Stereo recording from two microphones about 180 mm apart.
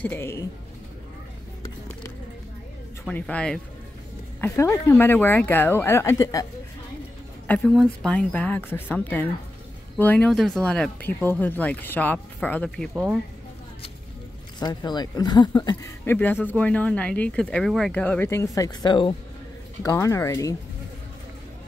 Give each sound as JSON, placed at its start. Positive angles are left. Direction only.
{"t": 0.0, "sound": "speech", "side_deg": 15}
{"t": 3.1, "sound": "speech", "side_deg": 5}
{"t": 7.4, "sound": "speech", "side_deg": 5}
{"t": 12.9, "sound": "speech", "side_deg": -5}
{"t": 14.6, "sound": "speech", "side_deg": 25}